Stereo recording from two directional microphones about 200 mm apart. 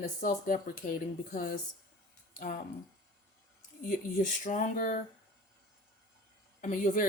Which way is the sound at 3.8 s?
40° left (ahead or behind).